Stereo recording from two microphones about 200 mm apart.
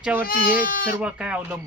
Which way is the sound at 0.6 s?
45° left (ahead or behind).